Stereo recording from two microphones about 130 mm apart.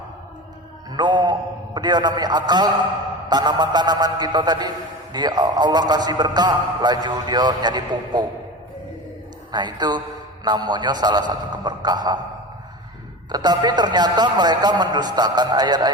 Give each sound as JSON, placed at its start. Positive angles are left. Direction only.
{"t": 0.9, "sound": "a sound", "side_deg": -35}
{"t": 3.2, "sound": "a man's voice", "side_deg": -35}
{"t": 9.5, "sound": "a man's voice", "side_deg": -35}
{"t": 13.3, "sound": "a man's voice", "side_deg": -30}